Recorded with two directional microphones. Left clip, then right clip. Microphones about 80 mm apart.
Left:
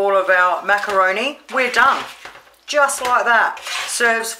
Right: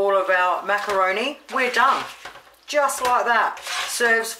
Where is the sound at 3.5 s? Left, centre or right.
Centre.